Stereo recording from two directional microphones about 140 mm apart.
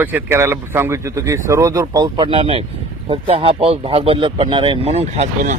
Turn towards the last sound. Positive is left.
turn(degrees=-50)  # may be behind; listen again after turning